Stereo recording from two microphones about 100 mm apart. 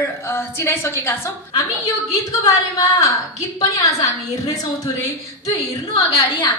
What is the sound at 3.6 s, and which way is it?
Speech, 35° left (ahead or behind).